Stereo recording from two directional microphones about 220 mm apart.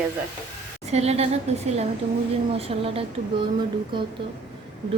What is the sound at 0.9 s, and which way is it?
A woman's voice, 30° right (ahead or behind).